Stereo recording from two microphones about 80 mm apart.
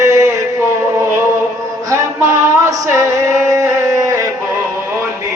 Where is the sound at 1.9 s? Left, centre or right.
Right.